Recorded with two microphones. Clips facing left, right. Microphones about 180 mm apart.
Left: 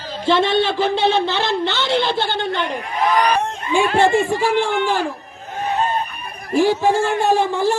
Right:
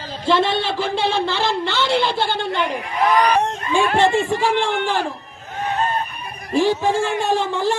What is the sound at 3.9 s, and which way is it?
Speech, 45° left (ahead or behind).